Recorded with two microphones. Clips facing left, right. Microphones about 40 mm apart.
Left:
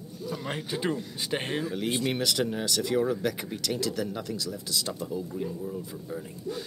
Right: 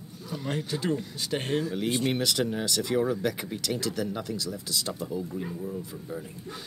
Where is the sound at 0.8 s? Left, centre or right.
Centre.